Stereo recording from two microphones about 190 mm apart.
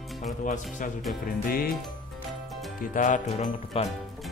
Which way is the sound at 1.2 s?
50° left (ahead or behind).